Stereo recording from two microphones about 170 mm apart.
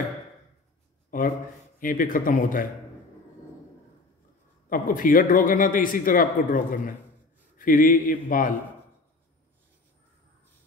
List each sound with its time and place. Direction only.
1.1 s a man's voice: 55° left (ahead or behind)
4.6 s a man's voice: 55° left (ahead or behind)